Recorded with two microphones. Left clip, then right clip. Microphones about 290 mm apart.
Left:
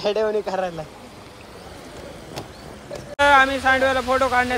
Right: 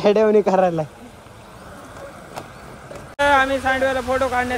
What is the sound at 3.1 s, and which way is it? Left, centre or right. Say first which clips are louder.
Speech: left 1 dB; centre.